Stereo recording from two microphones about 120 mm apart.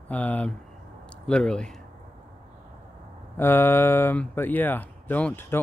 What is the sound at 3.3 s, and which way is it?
Speech, 20° left (ahead or behind).